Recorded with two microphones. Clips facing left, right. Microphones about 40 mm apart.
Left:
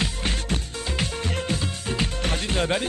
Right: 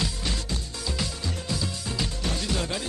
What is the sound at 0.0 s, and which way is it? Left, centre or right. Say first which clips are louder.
Music: left 3 dB; left.